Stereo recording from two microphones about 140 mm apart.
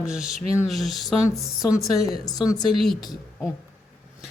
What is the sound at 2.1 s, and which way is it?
Speech, 30° left (ahead or behind).